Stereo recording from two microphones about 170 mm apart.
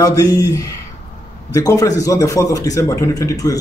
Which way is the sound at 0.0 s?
20° left (ahead or behind).